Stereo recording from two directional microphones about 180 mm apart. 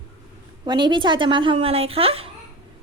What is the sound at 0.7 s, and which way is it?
A woman's voice, 25° right (ahead or behind).